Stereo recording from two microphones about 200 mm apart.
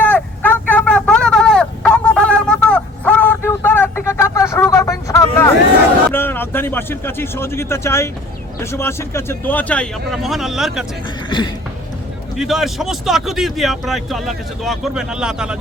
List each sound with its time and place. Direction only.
0.0 s fowl: 10° left (ahead or behind)
6.1 s a man's voice: 10° left (ahead or behind)
11.3 s a sound: 25° left (ahead or behind)
12.4 s speech: centre (ahead or behind)